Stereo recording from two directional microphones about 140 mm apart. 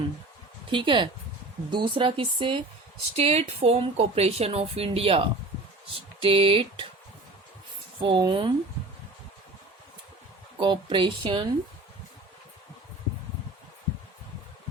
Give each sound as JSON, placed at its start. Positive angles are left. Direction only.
{"t": 0.7, "sound": "speech", "side_deg": -35}
{"t": 3.2, "sound": "a woman's voice", "side_deg": -50}
{"t": 6.2, "sound": "speech", "side_deg": -40}
{"t": 8.0, "sound": "speech", "side_deg": -35}
{"t": 10.6, "sound": "speech", "side_deg": -35}